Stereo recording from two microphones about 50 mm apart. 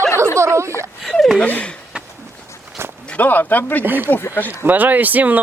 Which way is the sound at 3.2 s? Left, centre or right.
Left.